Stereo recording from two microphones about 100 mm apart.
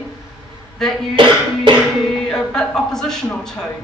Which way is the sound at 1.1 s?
55° right (ahead or behind).